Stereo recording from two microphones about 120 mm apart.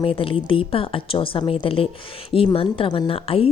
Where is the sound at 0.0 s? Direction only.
50° left (ahead or behind).